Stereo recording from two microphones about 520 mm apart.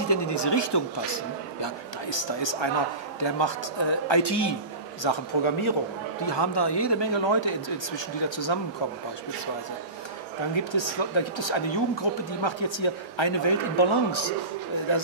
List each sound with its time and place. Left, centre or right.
0.1 s speech: left
5.0 s speech: left
6.2 s speech: left
10.5 s speech: left